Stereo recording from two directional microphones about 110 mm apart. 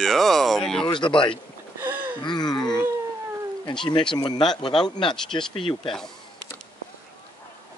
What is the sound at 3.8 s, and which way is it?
Speech, 45° left (ahead or behind).